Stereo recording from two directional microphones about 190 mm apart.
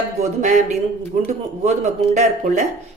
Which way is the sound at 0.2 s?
40° right (ahead or behind).